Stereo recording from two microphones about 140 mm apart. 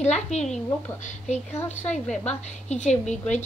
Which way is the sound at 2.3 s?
55° left (ahead or behind).